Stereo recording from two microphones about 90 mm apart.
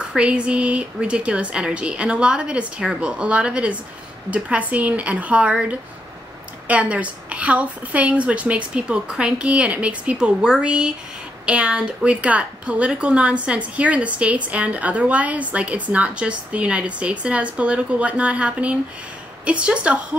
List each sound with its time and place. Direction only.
0.0 s a woman's voice: 10° right (ahead or behind)